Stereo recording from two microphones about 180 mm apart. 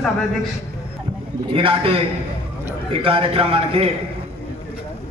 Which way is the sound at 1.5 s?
30° right (ahead or behind).